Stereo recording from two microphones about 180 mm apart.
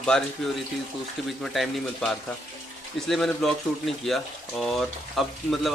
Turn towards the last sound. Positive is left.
turn(degrees=0)  # may be behind; listen again after turning